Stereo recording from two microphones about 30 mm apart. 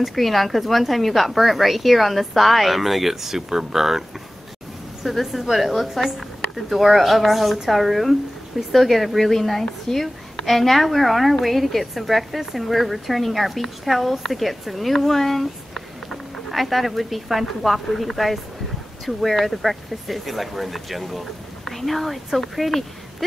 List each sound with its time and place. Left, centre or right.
0.1 s a woman's voice: centre
5.0 s a woman's voice: centre
9.9 s a woman's voice: centre
10.4 s a woman's voice: centre